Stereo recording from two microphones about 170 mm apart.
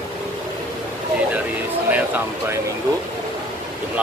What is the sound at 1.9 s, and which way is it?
Speech, 10° right (ahead or behind).